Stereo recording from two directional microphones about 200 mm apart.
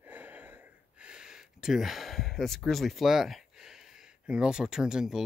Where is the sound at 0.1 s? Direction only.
10° right (ahead or behind).